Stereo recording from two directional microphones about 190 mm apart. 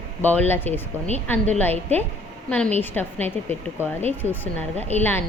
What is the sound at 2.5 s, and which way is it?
A woman's voice, 5° left (ahead or behind).